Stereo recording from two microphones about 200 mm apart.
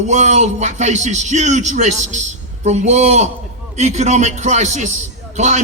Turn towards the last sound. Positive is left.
turn(degrees=-35)  # may be behind; listen again after turning